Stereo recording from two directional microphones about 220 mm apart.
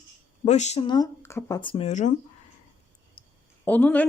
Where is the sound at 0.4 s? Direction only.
30° left (ahead or behind); by 1.7 s 15° left (ahead or behind).